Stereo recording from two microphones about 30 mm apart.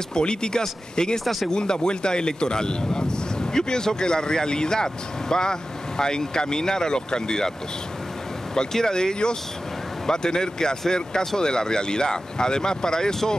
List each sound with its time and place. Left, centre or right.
0.1 s speech: left
1.2 s speech: centre
1.5 s speech: left
8.5 s speech: left